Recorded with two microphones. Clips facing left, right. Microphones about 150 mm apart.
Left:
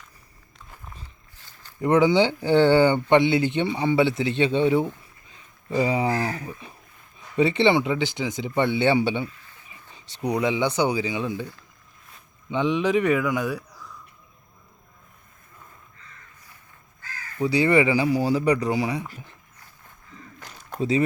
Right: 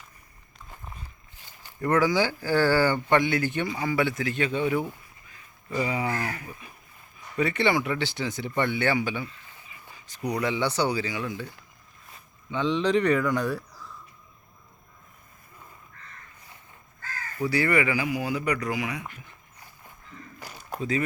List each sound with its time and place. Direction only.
1.4 s zipper: 15° right (ahead or behind)
1.8 s speech: 20° left (ahead or behind)
10.5 s speech: 15° left (ahead or behind)
12.5 s a man's voice: 15° left (ahead or behind); by 13.9 s centre (ahead or behind)
17.4 s speech: 20° left (ahead or behind)
20.4 s a sound: 5° right (ahead or behind)